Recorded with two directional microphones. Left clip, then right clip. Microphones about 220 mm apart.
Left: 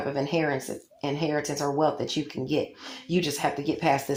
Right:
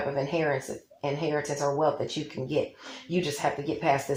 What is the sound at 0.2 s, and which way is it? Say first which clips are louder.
Speech: left 2 dB; 45° left (ahead or behind).